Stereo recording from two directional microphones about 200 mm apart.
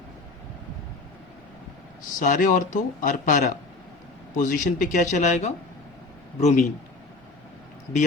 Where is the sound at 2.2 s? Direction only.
40° left (ahead or behind).